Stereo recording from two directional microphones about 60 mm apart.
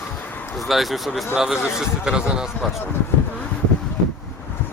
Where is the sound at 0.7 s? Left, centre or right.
Centre.